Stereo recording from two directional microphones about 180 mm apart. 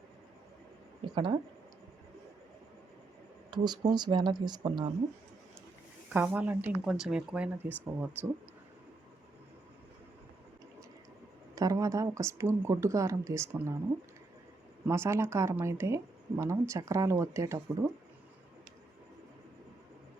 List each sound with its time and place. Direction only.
1.1 s speech: 25° right (ahead or behind)
3.5 s speech: 25° right (ahead or behind)
6.1 s speech: 10° right (ahead or behind)
11.5 s speech: 20° right (ahead or behind)
14.8 s speech: 15° right (ahead or behind)